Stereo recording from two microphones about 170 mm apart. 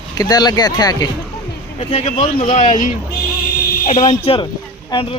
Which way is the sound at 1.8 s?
40° left (ahead or behind).